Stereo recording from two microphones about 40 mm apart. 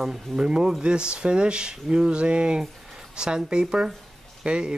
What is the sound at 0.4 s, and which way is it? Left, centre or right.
Speech, centre.